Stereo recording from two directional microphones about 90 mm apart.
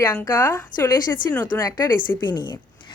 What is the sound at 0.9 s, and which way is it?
A woman's voice, 50° left (ahead or behind).